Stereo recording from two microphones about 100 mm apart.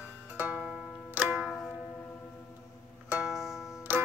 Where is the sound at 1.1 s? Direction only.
20° right (ahead or behind).